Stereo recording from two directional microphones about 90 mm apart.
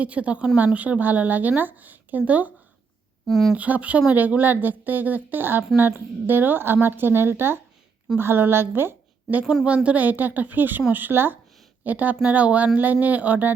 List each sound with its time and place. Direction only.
0.0 s a woman's voice: 15° right (ahead or behind)
3.2 s speech: centre (ahead or behind)
3.5 s a woman's voice: 15° right (ahead or behind)